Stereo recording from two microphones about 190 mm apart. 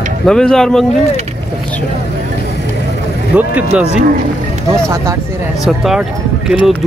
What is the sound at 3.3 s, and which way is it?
Speech, 5° right (ahead or behind).